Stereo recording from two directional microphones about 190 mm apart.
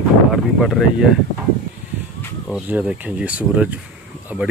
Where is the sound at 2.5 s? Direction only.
5° right (ahead or behind).